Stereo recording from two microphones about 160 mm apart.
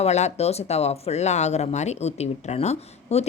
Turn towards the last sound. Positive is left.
turn(degrees=40)  # may be behind; listen again after turning